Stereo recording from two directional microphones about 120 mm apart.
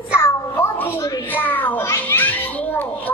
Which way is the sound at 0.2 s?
20° left (ahead or behind).